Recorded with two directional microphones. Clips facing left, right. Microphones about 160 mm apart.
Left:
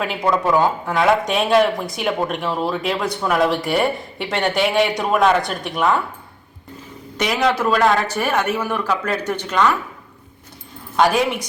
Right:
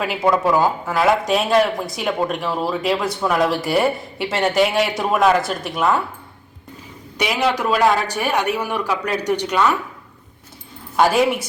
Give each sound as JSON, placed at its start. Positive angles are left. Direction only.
{"t": 0.0, "sound": "speech", "side_deg": -5}
{"t": 7.2, "sound": "a man's voice", "side_deg": -10}
{"t": 10.9, "sound": "a man's voice", "side_deg": -5}